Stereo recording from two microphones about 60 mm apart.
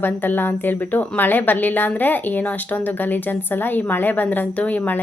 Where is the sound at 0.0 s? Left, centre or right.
Left.